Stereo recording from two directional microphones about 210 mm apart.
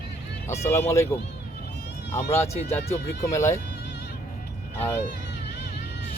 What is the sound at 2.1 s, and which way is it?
Speech, 10° left (ahead or behind).